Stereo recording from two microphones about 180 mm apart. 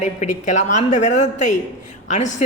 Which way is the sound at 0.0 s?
40° left (ahead or behind).